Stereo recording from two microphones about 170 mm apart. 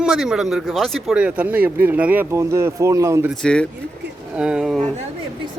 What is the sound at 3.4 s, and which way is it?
Speech, 5° left (ahead or behind).